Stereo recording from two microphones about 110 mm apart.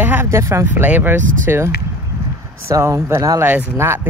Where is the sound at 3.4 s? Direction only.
20° right (ahead or behind).